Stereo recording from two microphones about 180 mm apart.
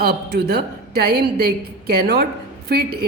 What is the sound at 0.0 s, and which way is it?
Speech, 60° right (ahead or behind).